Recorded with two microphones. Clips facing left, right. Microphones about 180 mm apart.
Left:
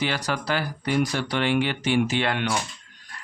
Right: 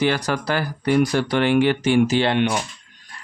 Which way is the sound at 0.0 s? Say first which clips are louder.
Right 6 dB; 45° right (ahead or behind).